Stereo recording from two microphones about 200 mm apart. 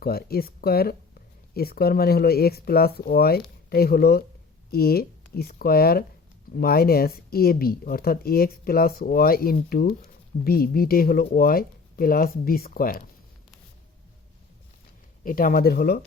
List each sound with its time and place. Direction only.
0.0 s speech: 50° left (ahead or behind)
15.2 s speech: 45° left (ahead or behind)